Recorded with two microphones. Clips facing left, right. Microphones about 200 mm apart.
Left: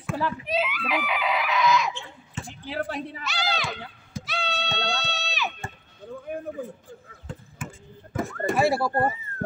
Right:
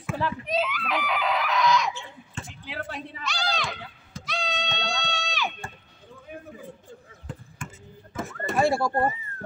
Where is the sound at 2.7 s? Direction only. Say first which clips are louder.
Left 6 dB; 35° left (ahead or behind).